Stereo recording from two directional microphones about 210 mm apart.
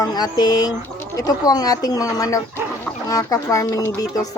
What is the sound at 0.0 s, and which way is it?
Speech, 20° left (ahead or behind).